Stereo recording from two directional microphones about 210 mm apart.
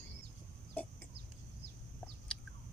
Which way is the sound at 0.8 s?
10° left (ahead or behind).